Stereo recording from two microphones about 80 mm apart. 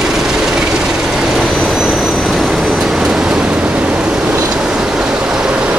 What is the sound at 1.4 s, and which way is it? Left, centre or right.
Vehicle, centre.